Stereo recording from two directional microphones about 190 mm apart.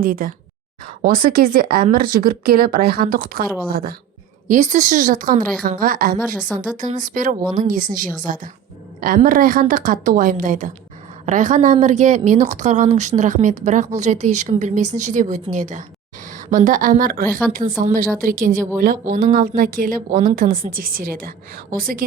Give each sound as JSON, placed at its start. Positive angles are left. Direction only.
{"t": 0.0, "sound": "speech", "side_deg": -50}
{"t": 4.4, "sound": "speech", "side_deg": -40}
{"t": 6.5, "sound": "speech", "side_deg": 5}
{"t": 6.9, "sound": "speech", "side_deg": -45}
{"t": 7.4, "sound": "speech", "side_deg": -20}
{"t": 8.2, "sound": "a woman's voice", "side_deg": -45}